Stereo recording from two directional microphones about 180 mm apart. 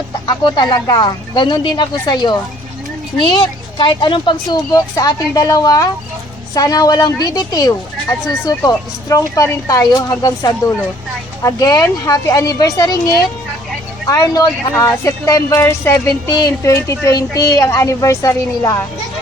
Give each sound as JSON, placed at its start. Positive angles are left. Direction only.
{"t": 0.4, "sound": "a woman's voice", "side_deg": 25}